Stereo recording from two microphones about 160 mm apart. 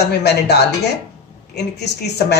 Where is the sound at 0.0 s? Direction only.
90° left.